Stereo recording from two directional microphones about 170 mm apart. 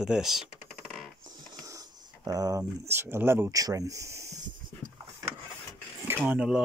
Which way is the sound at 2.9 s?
15° right (ahead or behind).